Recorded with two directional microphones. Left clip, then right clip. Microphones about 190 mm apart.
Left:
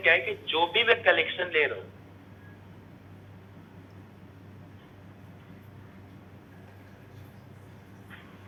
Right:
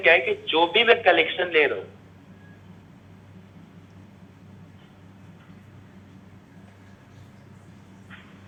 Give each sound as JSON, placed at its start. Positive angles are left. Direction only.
{"t": 0.0, "sound": "speech", "side_deg": 15}